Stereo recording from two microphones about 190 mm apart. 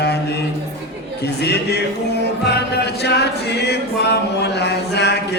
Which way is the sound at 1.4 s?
60° left (ahead or behind).